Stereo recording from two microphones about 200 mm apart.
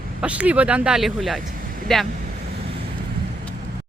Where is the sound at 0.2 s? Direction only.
5° right (ahead or behind).